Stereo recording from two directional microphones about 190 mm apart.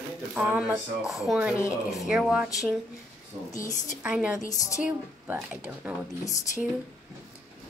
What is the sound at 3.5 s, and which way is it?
Speech, 20° left (ahead or behind).